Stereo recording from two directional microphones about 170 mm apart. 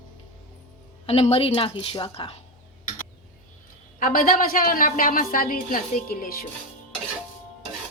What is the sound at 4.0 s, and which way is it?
A woman's voice, 55° left (ahead or behind).